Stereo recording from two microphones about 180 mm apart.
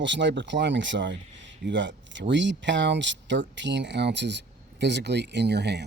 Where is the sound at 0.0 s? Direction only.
80° right.